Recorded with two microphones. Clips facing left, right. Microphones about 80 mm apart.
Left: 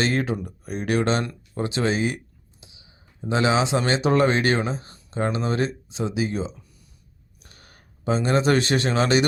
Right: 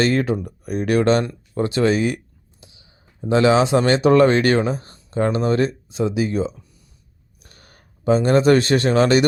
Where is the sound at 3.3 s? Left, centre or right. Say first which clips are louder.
Right 6 dB; right.